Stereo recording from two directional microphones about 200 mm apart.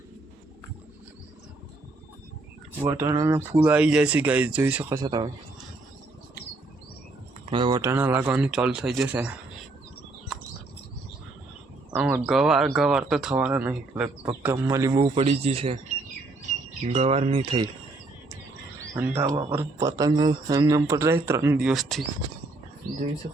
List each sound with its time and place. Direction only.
2.8 s speech: 15° right (ahead or behind)
7.5 s speech: 25° right (ahead or behind)
7.8 s speech: 10° right (ahead or behind)
11.9 s speech: 10° right (ahead or behind)
14.9 s speech: 25° right (ahead or behind)
16.9 s speech: 30° right (ahead or behind)
18.8 s speech: 10° right (ahead or behind)
21.7 s speech: centre (ahead or behind)